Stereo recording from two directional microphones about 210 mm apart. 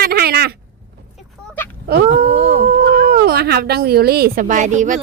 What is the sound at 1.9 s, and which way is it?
Speech, 45° right (ahead or behind).